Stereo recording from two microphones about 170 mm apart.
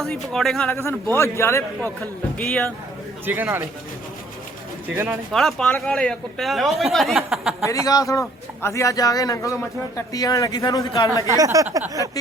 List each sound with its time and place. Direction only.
0.0 s speech: centre (ahead or behind)
0.7 s a man's voice: 15° left (ahead or behind)
3.2 s speech: 10° right (ahead or behind)
5.3 s speech: centre (ahead or behind)
7.6 s a man's voice: 20° left (ahead or behind)
11.3 s a sound: 20° right (ahead or behind)